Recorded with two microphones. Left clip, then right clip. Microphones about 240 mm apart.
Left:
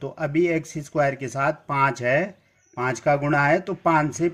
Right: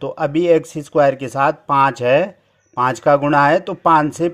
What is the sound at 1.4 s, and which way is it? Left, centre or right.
Speech, centre.